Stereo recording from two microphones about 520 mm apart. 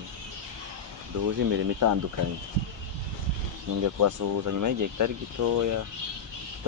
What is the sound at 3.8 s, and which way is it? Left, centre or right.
Speech, right.